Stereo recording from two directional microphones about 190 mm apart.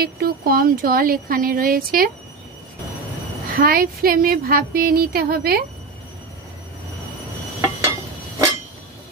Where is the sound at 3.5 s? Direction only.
50° right (ahead or behind).